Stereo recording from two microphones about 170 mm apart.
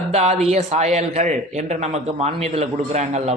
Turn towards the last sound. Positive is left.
turn(degrees=-40)  # may be behind; listen again after turning